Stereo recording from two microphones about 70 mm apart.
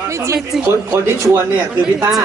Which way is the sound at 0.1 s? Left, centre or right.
Right.